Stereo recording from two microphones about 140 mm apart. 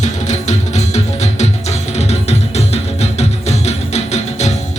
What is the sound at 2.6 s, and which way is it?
Music, 50° left (ahead or behind).